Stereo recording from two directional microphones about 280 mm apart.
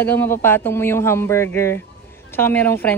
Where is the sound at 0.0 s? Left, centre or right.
Centre.